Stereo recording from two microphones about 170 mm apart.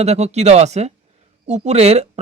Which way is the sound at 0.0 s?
40° right (ahead or behind).